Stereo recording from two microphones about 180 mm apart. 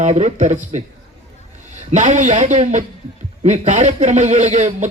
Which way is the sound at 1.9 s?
40° right (ahead or behind).